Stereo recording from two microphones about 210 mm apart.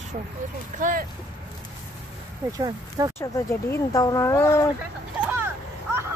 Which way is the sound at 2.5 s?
15° right (ahead or behind).